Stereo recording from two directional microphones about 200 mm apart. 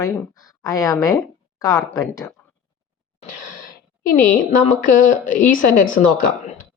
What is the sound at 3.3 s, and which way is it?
Sigh, 45° left (ahead or behind).